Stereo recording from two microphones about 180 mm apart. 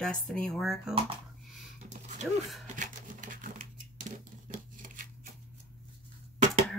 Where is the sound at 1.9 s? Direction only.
40° right (ahead or behind).